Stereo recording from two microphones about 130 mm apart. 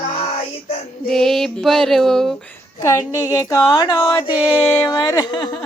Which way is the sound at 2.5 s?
25° left (ahead or behind).